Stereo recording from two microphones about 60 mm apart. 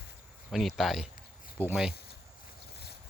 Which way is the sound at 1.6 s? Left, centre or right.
Right.